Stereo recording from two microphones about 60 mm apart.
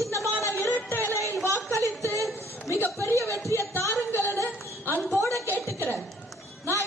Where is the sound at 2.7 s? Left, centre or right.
Left.